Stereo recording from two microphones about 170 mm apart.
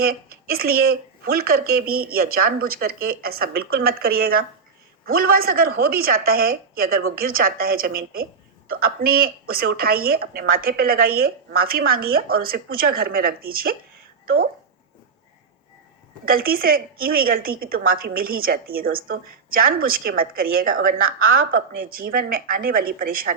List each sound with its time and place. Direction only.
0.0 s a woman's voice: 60° right (ahead or behind)
16.2 s a woman's voice: 60° right (ahead or behind)